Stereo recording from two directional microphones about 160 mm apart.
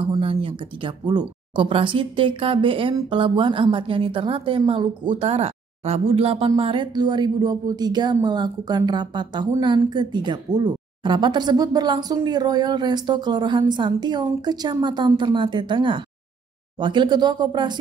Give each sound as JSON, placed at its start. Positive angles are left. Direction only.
{"t": 0.0, "sound": "a woman's voice", "side_deg": -35}